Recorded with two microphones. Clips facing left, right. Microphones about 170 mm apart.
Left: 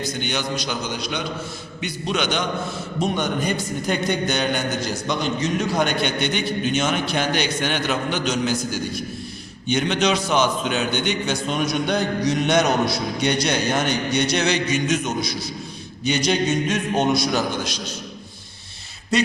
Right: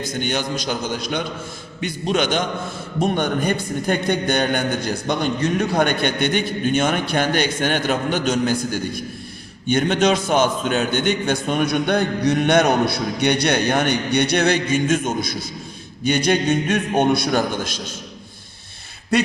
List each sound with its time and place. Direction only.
0.0 s a man's voice: 50° right (ahead or behind)
19.1 s a man's voice: 55° right (ahead or behind)